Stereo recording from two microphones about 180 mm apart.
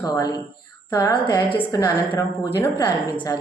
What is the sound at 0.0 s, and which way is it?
A woman's voice, 20° left (ahead or behind).